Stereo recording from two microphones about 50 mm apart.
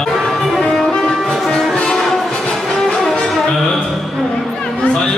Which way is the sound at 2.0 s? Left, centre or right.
Centre.